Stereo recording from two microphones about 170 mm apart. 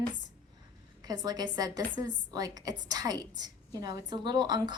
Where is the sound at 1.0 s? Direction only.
25° right (ahead or behind).